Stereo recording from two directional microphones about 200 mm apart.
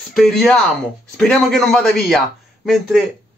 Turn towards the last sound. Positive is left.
turn(degrees=0)  # may be behind; listen again after turning